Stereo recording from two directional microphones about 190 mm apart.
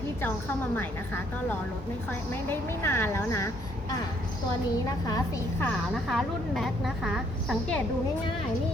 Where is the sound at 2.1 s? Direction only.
10° left (ahead or behind).